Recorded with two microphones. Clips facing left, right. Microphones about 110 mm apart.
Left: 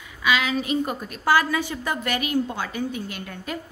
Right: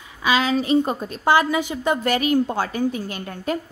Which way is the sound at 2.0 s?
35° right (ahead or behind).